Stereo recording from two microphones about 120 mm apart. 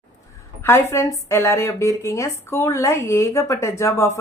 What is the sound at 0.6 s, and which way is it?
Speech, 20° left (ahead or behind).